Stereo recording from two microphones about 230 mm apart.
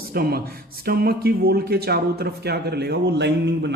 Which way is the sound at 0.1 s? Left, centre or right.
Right.